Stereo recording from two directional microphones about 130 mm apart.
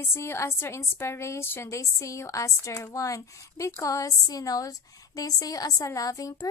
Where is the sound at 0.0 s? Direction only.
20° left (ahead or behind).